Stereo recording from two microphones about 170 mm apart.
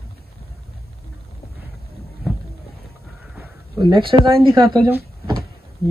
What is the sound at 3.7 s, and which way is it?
Speech, 25° right (ahead or behind).